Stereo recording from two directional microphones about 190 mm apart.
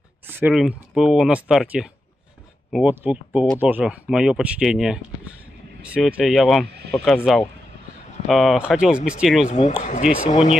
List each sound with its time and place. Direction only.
0.3 s speech: 5° right (ahead or behind)
9.5 s speech: 40° left (ahead or behind)